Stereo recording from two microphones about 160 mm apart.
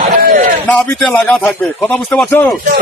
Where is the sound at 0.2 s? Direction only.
60° right (ahead or behind).